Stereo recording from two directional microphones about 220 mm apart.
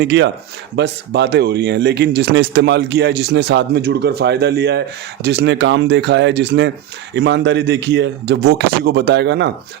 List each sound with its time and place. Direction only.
0.0 s speech: 50° right (ahead or behind)